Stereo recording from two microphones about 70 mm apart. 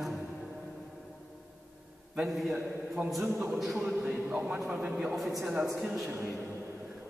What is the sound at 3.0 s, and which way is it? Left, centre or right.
A man's voice, right.